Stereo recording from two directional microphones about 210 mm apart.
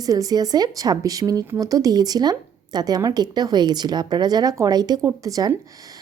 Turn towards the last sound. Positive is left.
turn(degrees=-15)  # may be behind; listen again after turning